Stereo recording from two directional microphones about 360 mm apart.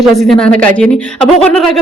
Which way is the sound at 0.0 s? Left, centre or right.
Centre.